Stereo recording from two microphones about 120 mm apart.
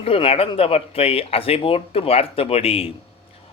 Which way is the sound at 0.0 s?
50° left (ahead or behind).